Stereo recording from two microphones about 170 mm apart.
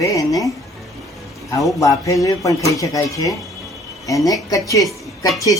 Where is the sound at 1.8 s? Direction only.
20° left (ahead or behind).